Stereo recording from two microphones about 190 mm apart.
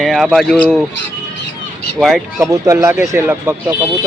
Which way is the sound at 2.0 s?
Centre (ahead or behind).